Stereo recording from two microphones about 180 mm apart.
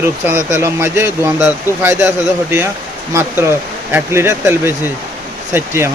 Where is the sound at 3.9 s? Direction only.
15° right (ahead or behind).